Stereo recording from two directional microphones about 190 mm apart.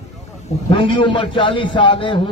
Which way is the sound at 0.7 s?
25° left (ahead or behind).